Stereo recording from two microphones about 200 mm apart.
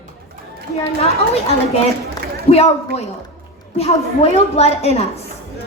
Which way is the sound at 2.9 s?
30° left (ahead or behind).